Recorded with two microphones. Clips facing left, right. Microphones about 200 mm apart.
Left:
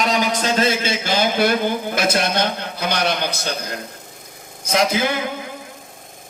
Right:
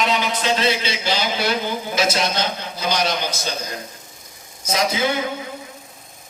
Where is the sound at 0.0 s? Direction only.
45° left (ahead or behind).